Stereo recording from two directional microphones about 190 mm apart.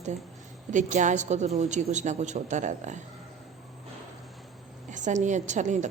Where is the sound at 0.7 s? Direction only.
40° right (ahead or behind).